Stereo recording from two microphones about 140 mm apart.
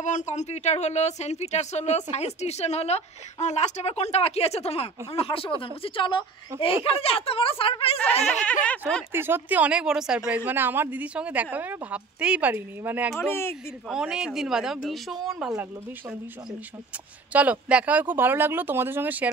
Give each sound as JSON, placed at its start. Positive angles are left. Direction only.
{"t": 0.0, "sound": "speech", "side_deg": 60}
{"t": 8.6, "sound": "speech", "side_deg": 5}
{"t": 9.1, "sound": "speech", "side_deg": -15}
{"t": 13.2, "sound": "speech", "side_deg": 20}
{"t": 13.8, "sound": "speech", "side_deg": -5}
{"t": 17.3, "sound": "speech", "side_deg": -10}